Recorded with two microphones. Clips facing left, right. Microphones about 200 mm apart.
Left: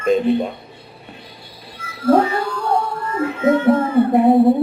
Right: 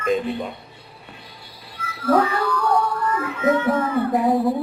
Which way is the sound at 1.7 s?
25° left (ahead or behind).